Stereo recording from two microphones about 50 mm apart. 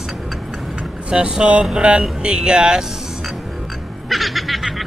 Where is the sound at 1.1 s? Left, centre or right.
Centre.